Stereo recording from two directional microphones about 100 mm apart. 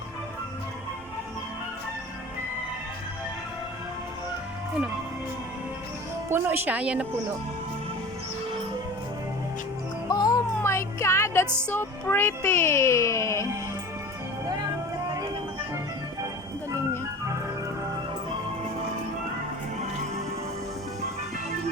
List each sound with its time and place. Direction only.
6.3 s speech: 20° right (ahead or behind)
10.1 s music: 40° left (ahead or behind)
10.6 s music: 25° left (ahead or behind)
11.7 s a child's voice: 20° left (ahead or behind)